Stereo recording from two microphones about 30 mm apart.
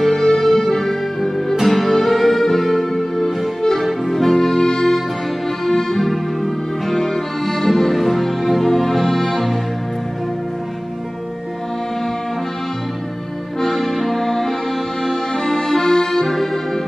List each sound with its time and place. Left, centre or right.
0.0 s music: centre
4.6 s music: left
6.0 s music: centre
13.6 s music: centre
15.0 s accordion: centre